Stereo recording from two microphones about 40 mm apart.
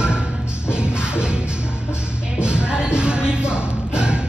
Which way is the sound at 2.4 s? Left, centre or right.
Right.